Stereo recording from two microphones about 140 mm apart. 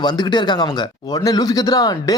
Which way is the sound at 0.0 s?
30° left (ahead or behind).